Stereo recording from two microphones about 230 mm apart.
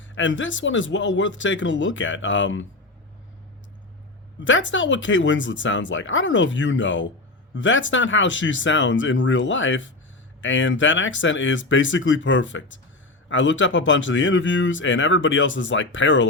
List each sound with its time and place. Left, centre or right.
0.1 s speech: left
4.4 s speech: left